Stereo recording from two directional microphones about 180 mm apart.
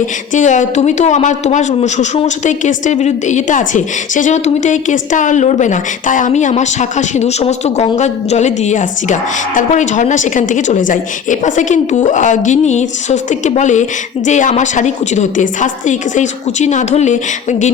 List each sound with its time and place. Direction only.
0.3 s a woman's voice: 45° left (ahead or behind)